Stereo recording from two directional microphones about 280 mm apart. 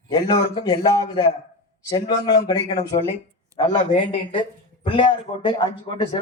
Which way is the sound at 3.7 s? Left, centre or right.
Centre.